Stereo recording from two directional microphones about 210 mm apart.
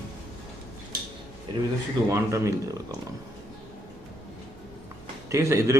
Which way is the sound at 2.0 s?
15° right (ahead or behind).